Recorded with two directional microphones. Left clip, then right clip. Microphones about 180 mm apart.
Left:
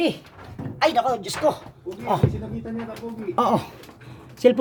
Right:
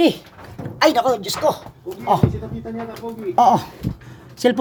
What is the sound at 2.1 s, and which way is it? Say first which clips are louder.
Speech: right 4 dB; centre (ahead or behind).